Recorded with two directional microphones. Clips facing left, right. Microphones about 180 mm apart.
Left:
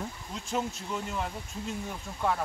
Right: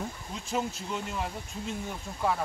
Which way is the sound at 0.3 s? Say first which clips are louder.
Even; 5° right (ahead or behind).